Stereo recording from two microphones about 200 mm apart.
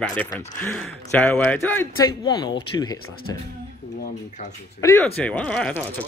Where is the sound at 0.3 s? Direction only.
10° left (ahead or behind).